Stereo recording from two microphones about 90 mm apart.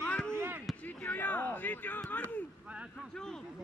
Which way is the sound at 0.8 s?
15° left (ahead or behind).